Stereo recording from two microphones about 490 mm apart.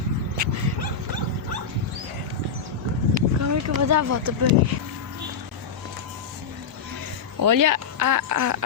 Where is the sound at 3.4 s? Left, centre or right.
Right.